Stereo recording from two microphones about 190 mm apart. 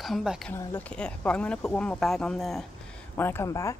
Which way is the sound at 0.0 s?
Centre (ahead or behind).